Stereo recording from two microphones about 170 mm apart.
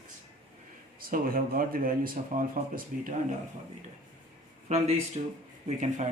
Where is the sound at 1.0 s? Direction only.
60° right (ahead or behind).